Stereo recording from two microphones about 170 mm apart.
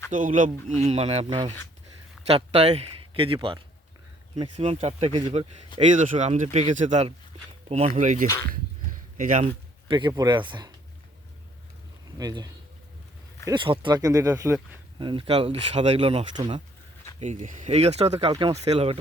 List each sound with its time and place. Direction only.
0.1 s a man's voice: 50° right (ahead or behind); by 5.8 s 30° right (ahead or behind)
5.8 s speech: 45° right (ahead or behind)
10.1 s speech: 25° right (ahead or behind)
12.1 s speech: 25° right (ahead or behind)
14.9 s speech: 30° right (ahead or behind)
17.2 s speech: 45° right (ahead or behind); by 18.5 s 30° right (ahead or behind)
18.5 s speech: 40° right (ahead or behind)